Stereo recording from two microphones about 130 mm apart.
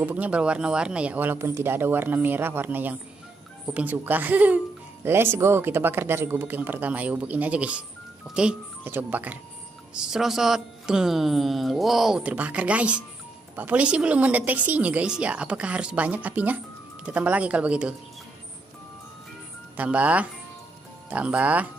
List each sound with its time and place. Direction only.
0.0 s a woman's voice: 10° right (ahead or behind)
19.8 s a woman's voice: 10° right (ahead or behind)